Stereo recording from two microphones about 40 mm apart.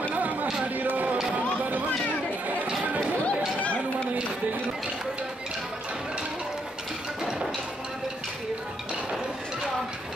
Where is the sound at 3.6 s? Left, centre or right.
Left.